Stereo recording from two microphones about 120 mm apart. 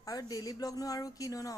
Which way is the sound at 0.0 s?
30° left (ahead or behind).